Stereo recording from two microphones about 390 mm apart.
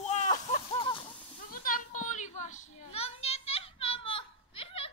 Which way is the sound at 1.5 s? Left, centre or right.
Left.